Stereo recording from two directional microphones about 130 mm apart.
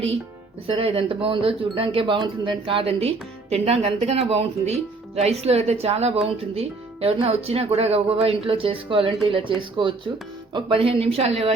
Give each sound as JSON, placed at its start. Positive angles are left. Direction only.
{"t": 0.7, "sound": "speech", "side_deg": -45}